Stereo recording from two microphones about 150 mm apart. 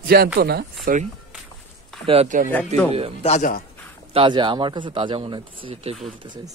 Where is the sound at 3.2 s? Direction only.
45° left (ahead or behind).